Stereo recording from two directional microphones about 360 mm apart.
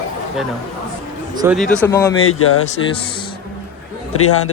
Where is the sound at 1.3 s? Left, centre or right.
Centre.